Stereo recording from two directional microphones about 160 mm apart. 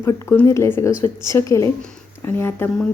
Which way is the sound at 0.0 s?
15° left (ahead or behind).